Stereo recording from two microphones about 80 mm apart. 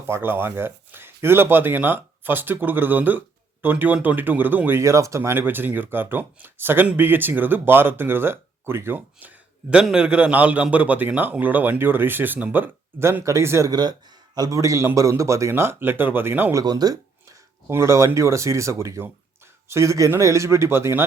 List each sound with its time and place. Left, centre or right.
0.1 s speech: right
4.8 s speech: right
9.9 s speech: centre; by 13.7 s right
13.7 s speech: right
14.3 s speech: right
16.6 s a sound: right
17.7 s speech: right